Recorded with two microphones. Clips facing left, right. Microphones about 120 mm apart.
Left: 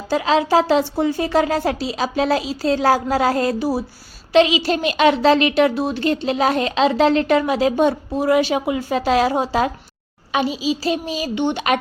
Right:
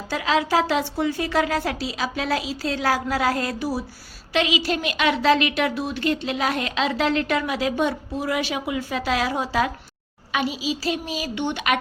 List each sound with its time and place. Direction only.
0.1 s a woman's voice: 30° left (ahead or behind)